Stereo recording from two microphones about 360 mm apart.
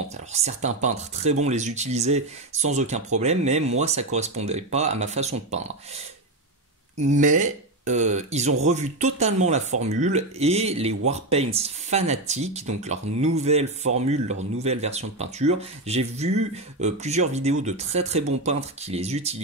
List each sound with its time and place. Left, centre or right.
0.3 s speech: centre
7.0 s speech: centre